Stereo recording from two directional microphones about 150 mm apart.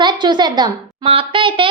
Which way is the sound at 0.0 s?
30° right (ahead or behind).